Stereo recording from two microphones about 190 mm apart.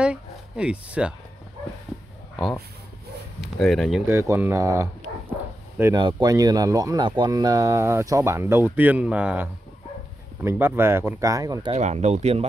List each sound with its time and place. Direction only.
0.0 s speech: 5° right (ahead or behind)
3.3 s speech: centre (ahead or behind)
4.1 s speech: 15° right (ahead or behind)
11.7 s speech: 35° right (ahead or behind)